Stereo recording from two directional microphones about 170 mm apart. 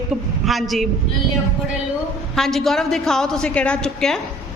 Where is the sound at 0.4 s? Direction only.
Centre (ahead or behind).